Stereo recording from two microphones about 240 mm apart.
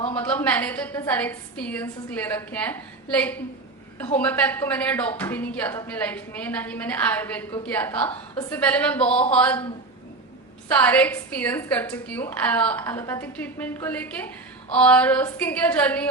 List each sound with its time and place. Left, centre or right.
0.1 s a woman's voice: centre
9.0 s speech: left
9.3 s speech: centre
10.8 s a woman's voice: centre